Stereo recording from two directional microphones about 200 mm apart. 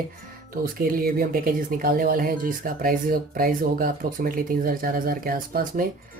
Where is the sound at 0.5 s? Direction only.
45° right (ahead or behind).